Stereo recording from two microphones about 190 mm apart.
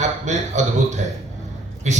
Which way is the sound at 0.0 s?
40° right (ahead or behind).